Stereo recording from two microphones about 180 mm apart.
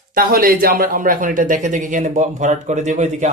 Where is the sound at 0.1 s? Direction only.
50° right (ahead or behind).